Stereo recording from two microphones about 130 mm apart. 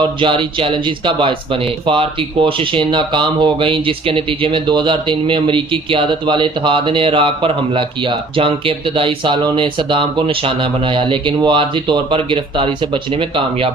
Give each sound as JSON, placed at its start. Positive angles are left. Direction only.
{"t": 0.0, "sound": "speech", "side_deg": -40}